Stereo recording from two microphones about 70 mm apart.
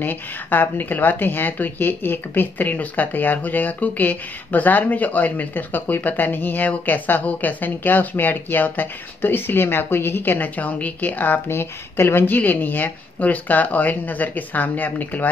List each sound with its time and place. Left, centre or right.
0.0 s speech: left